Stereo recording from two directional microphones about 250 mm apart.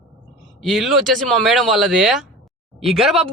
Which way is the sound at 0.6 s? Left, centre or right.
Centre.